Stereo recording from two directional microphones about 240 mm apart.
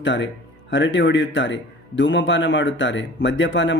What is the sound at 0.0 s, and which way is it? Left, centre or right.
Speech, left.